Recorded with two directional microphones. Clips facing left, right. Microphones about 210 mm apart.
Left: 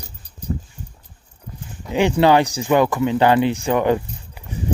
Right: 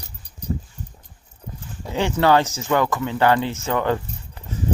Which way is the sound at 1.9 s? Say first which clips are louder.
Left 3 dB; 15° left (ahead or behind).